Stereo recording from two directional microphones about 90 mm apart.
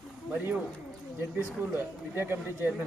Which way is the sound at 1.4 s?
25° right (ahead or behind).